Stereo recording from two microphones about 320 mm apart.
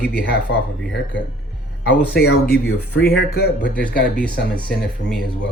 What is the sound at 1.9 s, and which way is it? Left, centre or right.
Speech, left.